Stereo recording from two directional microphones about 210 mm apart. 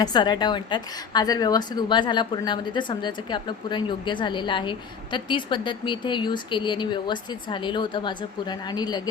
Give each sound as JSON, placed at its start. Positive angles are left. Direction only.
{"t": 0.0, "sound": "a woman's voice", "side_deg": 20}